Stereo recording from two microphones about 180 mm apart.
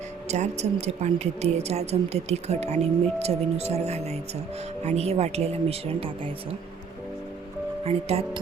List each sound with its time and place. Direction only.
0.3 s speech: 40° right (ahead or behind)
7.9 s speech: 35° right (ahead or behind)